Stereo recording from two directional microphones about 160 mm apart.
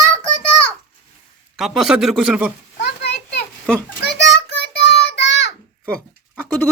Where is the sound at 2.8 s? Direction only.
90° left.